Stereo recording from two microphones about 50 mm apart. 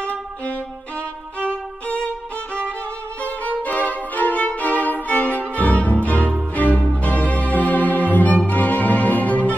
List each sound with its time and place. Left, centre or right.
3.2 s violin: left
6.5 s music: left